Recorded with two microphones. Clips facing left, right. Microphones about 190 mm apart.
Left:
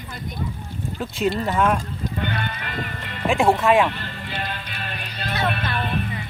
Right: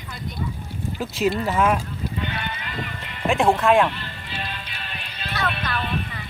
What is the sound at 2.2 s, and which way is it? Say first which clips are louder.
Music: left 5 dB; 50° left (ahead or behind).